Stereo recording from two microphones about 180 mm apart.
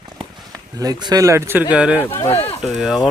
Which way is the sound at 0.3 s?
20° right (ahead or behind).